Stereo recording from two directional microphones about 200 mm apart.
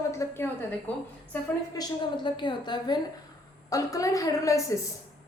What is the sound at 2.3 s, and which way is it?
A woman's voice, 25° left (ahead or behind).